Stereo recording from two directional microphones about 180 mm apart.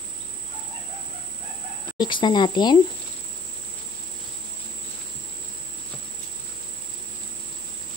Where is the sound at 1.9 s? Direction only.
25° left (ahead or behind).